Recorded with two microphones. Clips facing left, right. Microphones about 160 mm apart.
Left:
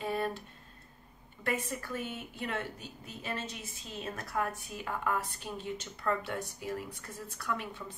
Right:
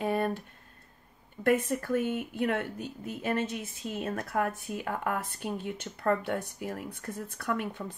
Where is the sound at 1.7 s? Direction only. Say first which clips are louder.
Right 9 dB; 55° right (ahead or behind).